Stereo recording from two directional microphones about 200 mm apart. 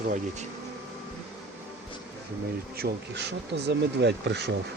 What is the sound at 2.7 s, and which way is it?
Speech, 55° right (ahead or behind).